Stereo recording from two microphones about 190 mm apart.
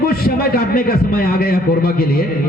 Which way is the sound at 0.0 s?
50° left (ahead or behind).